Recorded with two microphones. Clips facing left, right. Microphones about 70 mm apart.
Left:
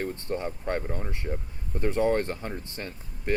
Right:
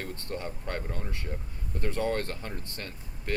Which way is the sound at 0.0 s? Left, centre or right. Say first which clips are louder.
Left 5 dB; left.